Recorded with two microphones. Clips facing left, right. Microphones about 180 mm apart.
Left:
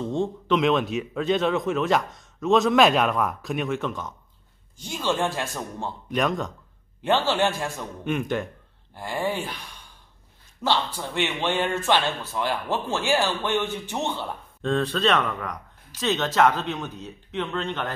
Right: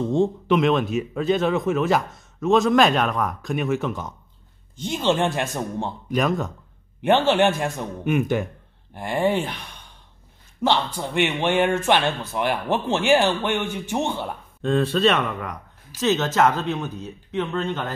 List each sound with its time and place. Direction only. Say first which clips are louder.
0.5 s a man's voice: left 1 dB; centre (ahead or behind)
4.7 s speech: right 5 dB; 20° right (ahead or behind)
6.0 s a man's voice: right 2 dB; centre (ahead or behind)
7.0 s a man's voice: right 4 dB; 20° right (ahead or behind)
8.9 s speech: right 6 dB; 20° right (ahead or behind)
10.6 s a man's voice: right 3 dB; 20° right (ahead or behind)